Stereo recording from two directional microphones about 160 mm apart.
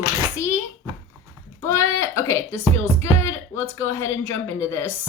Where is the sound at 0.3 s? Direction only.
15° left (ahead or behind).